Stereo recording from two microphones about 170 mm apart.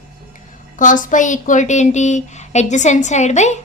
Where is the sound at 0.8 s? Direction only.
50° left (ahead or behind).